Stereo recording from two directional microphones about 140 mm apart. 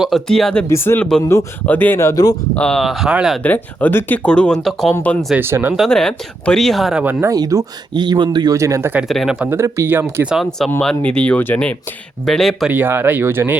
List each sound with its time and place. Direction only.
0.0 s speech: centre (ahead or behind)
0.7 s speech: 20° left (ahead or behind)
1.6 s speech: 10° left (ahead or behind)
2.6 s speech: 5° left (ahead or behind)
3.4 s speech: 10° left (ahead or behind)
5.4 s speech: 15° right (ahead or behind)
5.7 s speech: centre (ahead or behind)
7.0 s speech: 15° right (ahead or behind)
7.3 s speech: 25° right (ahead or behind)
9.0 s speech: centre (ahead or behind)
10.2 s speech: centre (ahead or behind)
12.7 s speech: 15° right (ahead or behind)